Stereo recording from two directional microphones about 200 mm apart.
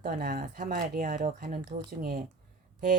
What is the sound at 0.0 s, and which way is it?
Speech, 50° right (ahead or behind).